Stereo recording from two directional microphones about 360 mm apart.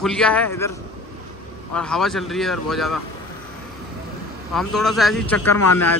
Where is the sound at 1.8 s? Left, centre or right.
Centre.